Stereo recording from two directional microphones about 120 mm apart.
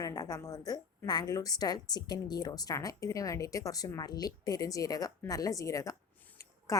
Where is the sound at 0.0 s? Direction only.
30° left (ahead or behind).